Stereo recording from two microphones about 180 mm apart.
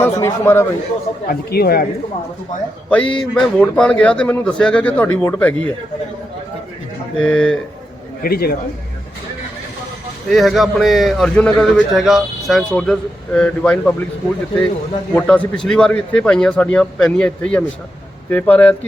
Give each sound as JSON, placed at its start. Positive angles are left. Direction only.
{"t": 0.0, "sound": "a man's voice", "side_deg": 15}
{"t": 1.3, "sound": "speech", "side_deg": 60}
{"t": 2.9, "sound": "a man's voice", "side_deg": 5}
{"t": 7.2, "sound": "a man's voice", "side_deg": 5}
{"t": 8.2, "sound": "speech", "side_deg": 55}
{"t": 10.2, "sound": "a man's voice", "side_deg": 0}
{"t": 15.1, "sound": "a man's voice", "side_deg": 5}